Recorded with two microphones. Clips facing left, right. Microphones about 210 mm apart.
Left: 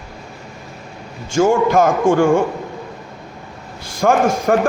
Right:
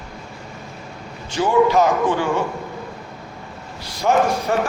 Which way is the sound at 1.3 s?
45° left (ahead or behind).